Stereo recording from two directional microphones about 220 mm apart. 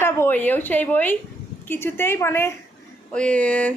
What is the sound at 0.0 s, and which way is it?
A woman's voice, 10° left (ahead or behind).